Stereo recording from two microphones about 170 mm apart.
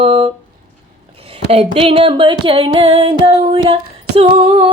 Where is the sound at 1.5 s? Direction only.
35° right (ahead or behind).